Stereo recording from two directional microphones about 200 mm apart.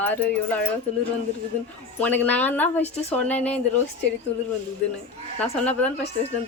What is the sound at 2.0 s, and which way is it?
A woman's voice, 10° left (ahead or behind).